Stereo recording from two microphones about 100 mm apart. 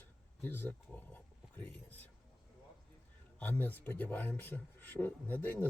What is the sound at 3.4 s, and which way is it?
Speech, 20° left (ahead or behind).